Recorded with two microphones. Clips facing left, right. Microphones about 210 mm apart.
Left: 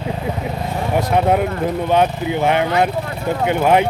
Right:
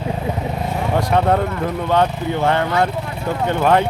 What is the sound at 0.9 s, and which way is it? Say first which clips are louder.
Speech: left 1 dB; 5° left (ahead or behind).